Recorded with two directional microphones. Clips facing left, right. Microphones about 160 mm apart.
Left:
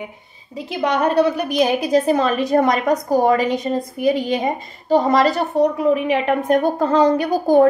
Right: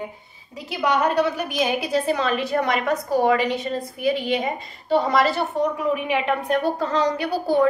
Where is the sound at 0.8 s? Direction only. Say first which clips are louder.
Left 3 dB; 35° left (ahead or behind).